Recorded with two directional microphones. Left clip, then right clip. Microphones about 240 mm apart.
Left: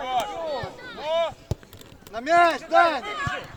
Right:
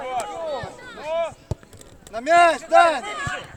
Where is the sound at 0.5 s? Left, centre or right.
Centre.